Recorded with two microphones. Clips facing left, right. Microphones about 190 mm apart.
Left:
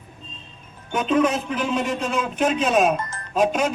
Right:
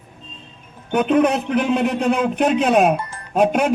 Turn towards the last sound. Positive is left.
turn(degrees=-60)  # may be behind; listen again after turning